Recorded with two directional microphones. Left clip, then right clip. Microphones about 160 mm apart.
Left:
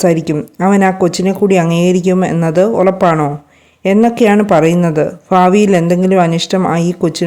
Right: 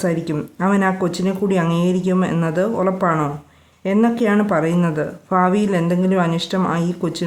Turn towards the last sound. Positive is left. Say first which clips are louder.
# left 8 dB
turn(degrees=40)  # may be behind; listen again after turning